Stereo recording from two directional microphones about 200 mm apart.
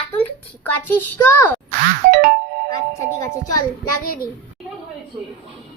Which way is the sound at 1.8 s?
50° right (ahead or behind).